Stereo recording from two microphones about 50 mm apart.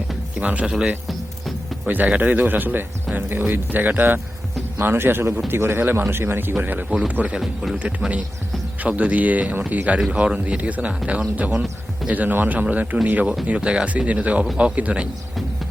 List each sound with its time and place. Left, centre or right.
0.3 s speech: right
0.6 s speech: centre
1.0 s music: centre
1.9 s speech: right
7.3 s speech: centre
7.8 s speech: right
10.0 s speech: centre